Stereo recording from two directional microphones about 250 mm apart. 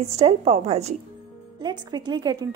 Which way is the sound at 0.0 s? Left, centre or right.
Right.